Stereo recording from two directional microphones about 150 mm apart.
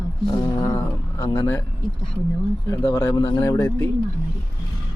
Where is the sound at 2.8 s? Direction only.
15° left (ahead or behind).